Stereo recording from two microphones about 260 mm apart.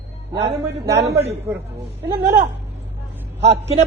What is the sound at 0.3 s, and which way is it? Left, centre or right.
Speech, right.